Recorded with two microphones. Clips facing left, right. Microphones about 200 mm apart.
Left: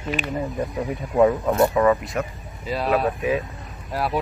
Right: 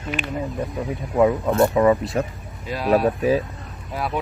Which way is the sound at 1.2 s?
Centre (ahead or behind).